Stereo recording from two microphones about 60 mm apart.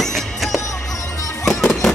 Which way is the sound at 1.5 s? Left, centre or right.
Centre.